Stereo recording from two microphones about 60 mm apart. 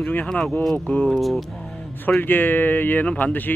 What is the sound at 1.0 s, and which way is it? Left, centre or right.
Speech, centre.